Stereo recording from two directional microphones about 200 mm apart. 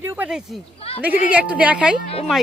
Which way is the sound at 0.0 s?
10° right (ahead or behind).